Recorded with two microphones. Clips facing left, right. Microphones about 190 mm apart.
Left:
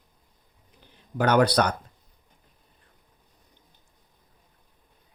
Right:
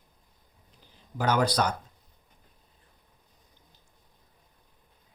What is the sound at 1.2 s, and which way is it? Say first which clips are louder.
Speech: left 5 dB; 65° left (ahead or behind).